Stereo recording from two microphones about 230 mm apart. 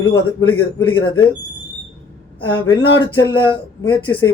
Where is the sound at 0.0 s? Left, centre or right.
Centre.